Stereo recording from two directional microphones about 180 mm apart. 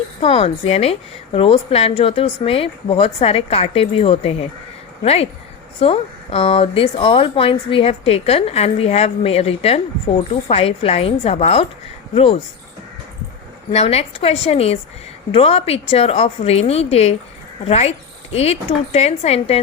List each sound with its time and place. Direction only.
0.2 s speech: 35° left (ahead or behind)
13.7 s speech: 35° left (ahead or behind)